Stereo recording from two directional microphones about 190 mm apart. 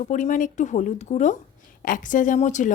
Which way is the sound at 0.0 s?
40° left (ahead or behind).